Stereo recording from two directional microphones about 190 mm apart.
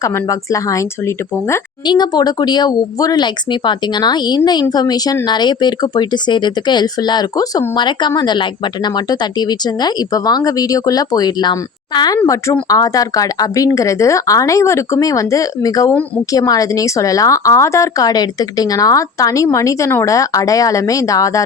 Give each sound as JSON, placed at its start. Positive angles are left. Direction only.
{"t": 0.0, "sound": "a woman's voice", "side_deg": 15}